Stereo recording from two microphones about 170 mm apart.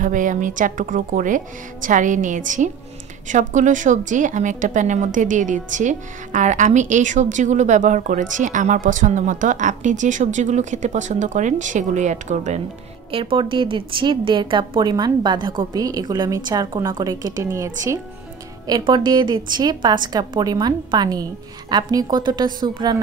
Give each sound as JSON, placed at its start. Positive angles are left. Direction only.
{"t": 0.0, "sound": "a woman's voice", "side_deg": -50}
{"t": 13.1, "sound": "a woman's voice", "side_deg": -30}